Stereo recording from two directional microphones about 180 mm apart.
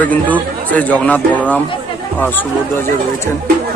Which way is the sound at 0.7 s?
5° left (ahead or behind).